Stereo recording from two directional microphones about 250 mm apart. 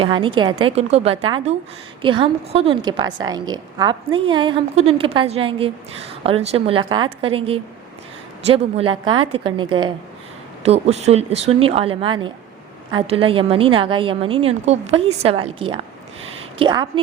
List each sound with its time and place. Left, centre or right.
0.0 s a woman's voice: centre